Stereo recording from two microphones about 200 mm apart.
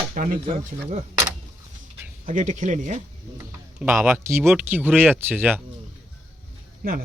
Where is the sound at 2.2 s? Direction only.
40° right (ahead or behind).